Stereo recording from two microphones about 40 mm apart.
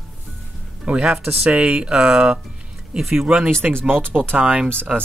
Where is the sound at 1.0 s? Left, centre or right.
Centre.